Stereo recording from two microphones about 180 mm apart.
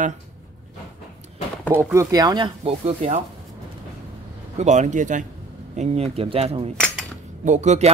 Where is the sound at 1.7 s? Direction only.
15° right (ahead or behind); by 3.2 s 35° right (ahead or behind).